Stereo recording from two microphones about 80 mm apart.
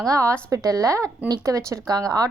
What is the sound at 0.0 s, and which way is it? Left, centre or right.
A woman's voice, right.